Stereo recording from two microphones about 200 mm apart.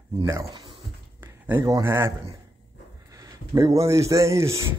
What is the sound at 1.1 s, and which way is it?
A man's voice, 10° right (ahead or behind).